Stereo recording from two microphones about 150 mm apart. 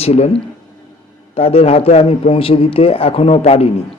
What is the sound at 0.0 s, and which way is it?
Speech, 45° left (ahead or behind).